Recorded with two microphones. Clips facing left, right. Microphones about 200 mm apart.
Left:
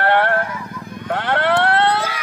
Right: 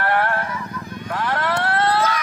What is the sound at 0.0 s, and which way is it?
Vehicle, 65° left (ahead or behind).